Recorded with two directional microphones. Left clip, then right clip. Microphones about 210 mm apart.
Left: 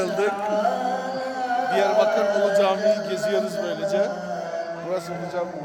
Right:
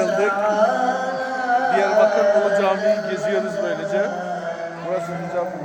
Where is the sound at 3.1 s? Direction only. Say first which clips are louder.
Right 2 dB; 10° left (ahead or behind).